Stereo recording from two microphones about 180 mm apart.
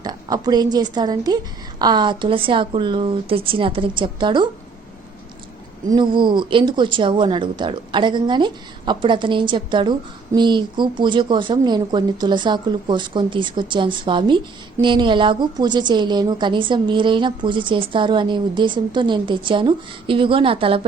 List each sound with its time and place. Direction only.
0.0 s a woman's voice: 20° right (ahead or behind)
5.9 s speech: 25° right (ahead or behind)